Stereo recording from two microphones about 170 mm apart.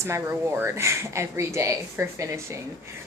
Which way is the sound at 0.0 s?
15° right (ahead or behind).